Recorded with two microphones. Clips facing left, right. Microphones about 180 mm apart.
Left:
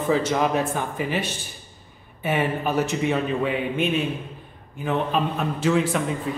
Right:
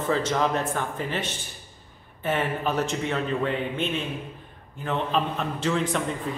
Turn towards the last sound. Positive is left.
turn(degrees=5)  # may be behind; listen again after turning